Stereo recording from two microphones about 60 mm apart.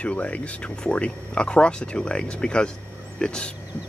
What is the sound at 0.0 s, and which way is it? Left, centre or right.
Speech, left.